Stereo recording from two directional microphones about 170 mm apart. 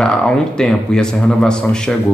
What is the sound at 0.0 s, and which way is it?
A man's voice, 5° left (ahead or behind).